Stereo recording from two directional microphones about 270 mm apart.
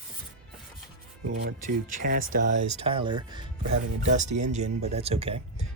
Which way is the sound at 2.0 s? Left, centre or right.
Right.